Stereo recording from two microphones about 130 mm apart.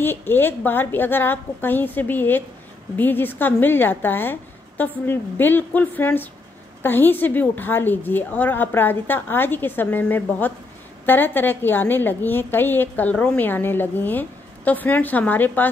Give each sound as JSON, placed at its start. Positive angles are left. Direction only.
{"t": 0.0, "sound": "a woman's voice", "side_deg": 15}